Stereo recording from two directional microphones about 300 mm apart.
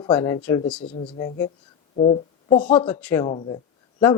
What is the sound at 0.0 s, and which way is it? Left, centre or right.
Speech, centre.